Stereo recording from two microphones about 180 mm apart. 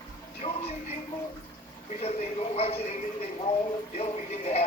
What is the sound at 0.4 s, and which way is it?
Speech, 35° left (ahead or behind).